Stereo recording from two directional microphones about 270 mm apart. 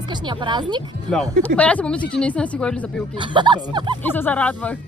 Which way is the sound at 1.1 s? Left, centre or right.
Centre.